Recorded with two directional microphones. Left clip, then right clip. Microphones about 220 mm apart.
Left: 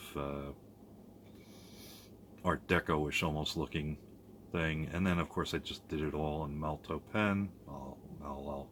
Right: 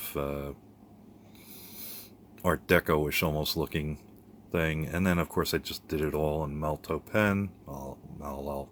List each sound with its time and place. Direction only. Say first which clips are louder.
0.0 s speech: right 7 dB; 30° right (ahead or behind)
2.4 s speech: right 7 dB; 35° right (ahead or behind)